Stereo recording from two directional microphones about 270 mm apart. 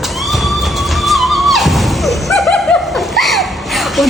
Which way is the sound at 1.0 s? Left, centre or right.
Centre.